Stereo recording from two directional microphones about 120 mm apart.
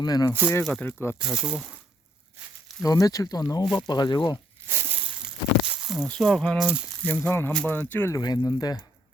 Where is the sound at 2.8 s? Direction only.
30° left (ahead or behind).